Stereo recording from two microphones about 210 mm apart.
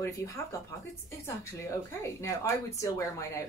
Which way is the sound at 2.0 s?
15° left (ahead or behind).